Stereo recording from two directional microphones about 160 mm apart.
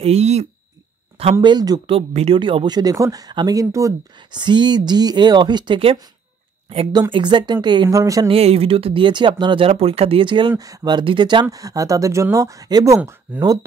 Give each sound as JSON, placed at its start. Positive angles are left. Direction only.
{"t": 0.0, "sound": "speech", "side_deg": -40}
{"t": 1.4, "sound": "speech", "side_deg": -25}
{"t": 2.0, "sound": "speech", "side_deg": -40}
{"t": 8.3, "sound": "speech", "side_deg": -40}